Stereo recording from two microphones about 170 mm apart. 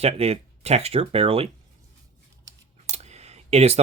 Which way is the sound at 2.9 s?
40° right (ahead or behind).